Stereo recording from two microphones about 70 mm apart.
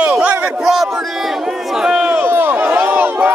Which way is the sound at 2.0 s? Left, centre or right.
Right.